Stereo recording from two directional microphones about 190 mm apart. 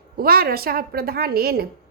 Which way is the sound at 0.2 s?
50° right (ahead or behind).